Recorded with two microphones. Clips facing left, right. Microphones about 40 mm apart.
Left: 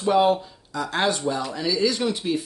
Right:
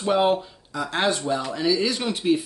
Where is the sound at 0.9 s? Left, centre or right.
Centre.